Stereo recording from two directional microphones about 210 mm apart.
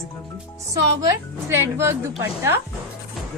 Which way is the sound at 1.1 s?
10° right (ahead or behind).